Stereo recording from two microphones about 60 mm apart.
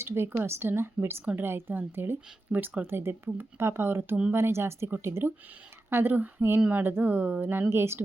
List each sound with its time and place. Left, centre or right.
0.0 s a woman's voice: right
7.7 s speech: right